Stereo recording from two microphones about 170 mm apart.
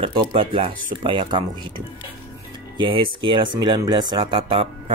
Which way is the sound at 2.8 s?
30° right (ahead or behind).